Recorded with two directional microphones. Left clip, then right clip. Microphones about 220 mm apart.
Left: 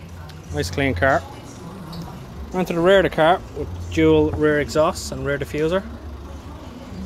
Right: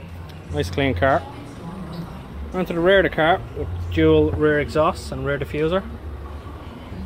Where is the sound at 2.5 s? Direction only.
20° left (ahead or behind); by 5.8 s 5° left (ahead or behind).